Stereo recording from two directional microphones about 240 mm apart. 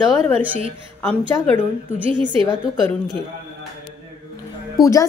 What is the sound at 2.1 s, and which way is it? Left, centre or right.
Speech, centre.